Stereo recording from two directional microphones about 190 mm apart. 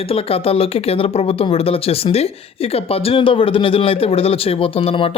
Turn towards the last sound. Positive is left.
turn(degrees=30)  # may be behind; listen again after turning